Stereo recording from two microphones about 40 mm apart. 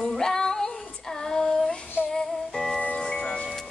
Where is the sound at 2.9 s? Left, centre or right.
Left.